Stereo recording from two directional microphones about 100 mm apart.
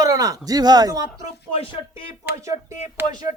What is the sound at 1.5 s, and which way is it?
Speech, 60° left (ahead or behind).